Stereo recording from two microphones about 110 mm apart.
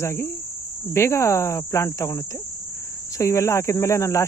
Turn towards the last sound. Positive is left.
turn(degrees=25)  # may be behind; listen again after turning